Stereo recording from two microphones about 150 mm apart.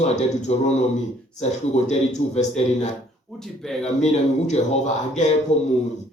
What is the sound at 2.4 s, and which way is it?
A man's voice, 50° left (ahead or behind).